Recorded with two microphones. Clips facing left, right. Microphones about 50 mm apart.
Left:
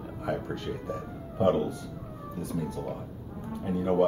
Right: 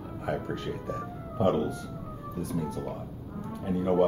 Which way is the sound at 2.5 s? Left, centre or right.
Centre.